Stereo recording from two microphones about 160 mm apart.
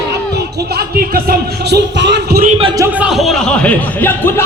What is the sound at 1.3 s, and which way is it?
Music, 90° right.